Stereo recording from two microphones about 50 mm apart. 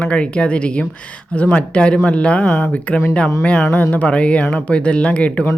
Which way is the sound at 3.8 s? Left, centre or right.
Left.